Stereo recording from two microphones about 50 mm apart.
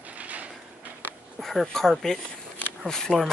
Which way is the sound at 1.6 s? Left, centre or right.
Centre.